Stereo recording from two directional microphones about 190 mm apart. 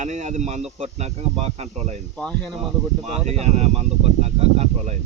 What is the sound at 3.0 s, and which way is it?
Speech, 35° right (ahead or behind).